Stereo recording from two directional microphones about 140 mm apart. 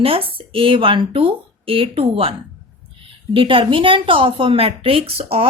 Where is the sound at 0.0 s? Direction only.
40° right (ahead or behind).